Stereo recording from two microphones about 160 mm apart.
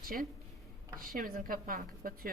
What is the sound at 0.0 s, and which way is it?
A woman's voice, 65° right (ahead or behind).